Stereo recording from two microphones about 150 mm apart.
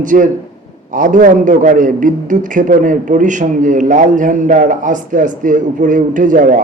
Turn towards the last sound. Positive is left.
turn(degrees=-60)  # may be behind; listen again after turning